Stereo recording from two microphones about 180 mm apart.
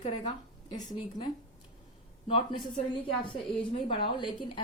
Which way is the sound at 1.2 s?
30° left (ahead or behind).